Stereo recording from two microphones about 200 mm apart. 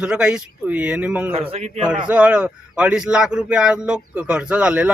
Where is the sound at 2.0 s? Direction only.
5° right (ahead or behind).